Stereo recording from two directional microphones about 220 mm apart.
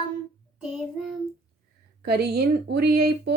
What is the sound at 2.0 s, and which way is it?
A woman's voice, 45° right (ahead or behind).